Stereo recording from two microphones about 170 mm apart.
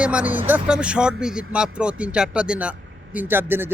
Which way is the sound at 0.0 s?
5° right (ahead or behind).